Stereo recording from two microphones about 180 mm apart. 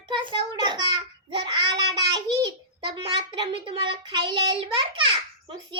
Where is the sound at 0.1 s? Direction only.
25° right (ahead or behind).